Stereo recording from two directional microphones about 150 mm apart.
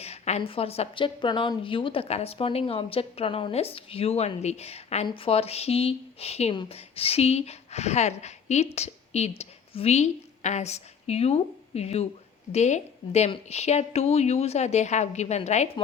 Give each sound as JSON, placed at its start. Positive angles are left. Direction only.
{"t": 0.0, "sound": "a woman's voice", "side_deg": 45}